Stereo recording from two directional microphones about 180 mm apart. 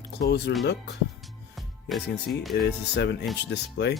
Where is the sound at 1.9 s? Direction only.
Centre (ahead or behind).